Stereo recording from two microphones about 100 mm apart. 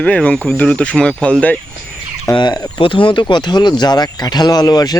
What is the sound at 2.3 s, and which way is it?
Speech, 45° left (ahead or behind).